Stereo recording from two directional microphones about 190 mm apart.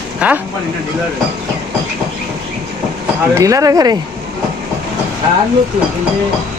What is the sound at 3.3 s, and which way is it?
Speech, 15° right (ahead or behind).